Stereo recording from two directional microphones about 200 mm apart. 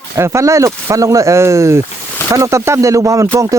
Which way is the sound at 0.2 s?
15° right (ahead or behind).